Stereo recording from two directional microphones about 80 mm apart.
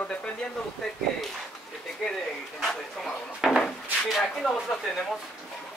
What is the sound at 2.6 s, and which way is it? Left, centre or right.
Speech, centre.